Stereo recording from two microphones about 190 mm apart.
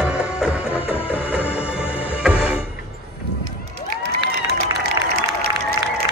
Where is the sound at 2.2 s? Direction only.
5° right (ahead or behind).